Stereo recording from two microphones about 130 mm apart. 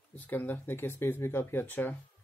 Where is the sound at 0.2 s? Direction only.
15° left (ahead or behind).